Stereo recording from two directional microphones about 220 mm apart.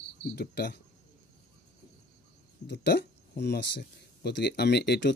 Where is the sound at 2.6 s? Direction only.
50° left (ahead or behind).